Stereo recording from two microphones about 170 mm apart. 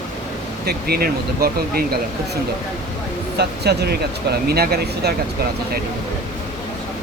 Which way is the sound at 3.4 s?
75° right (ahead or behind).